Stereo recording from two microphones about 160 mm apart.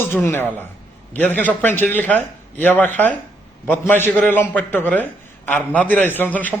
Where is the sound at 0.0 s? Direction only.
15° left (ahead or behind).